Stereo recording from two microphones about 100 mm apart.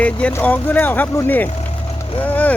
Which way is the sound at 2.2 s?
15° left (ahead or behind).